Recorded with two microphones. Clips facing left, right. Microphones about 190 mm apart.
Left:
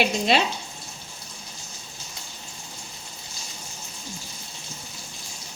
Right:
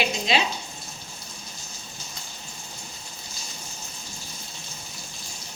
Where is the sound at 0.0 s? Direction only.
55° left (ahead or behind).